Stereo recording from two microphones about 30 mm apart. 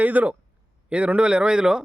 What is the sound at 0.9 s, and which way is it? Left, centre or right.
Speech, right.